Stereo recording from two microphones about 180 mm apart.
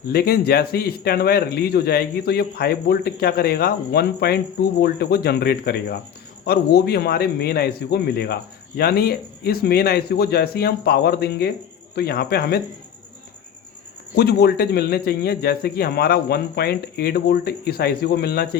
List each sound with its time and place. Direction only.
0.1 s a man's voice: 60° left (ahead or behind)
14.2 s a man's voice: 60° left (ahead or behind)